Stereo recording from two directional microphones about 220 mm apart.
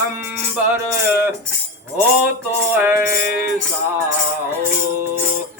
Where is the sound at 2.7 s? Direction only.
10° right (ahead or behind).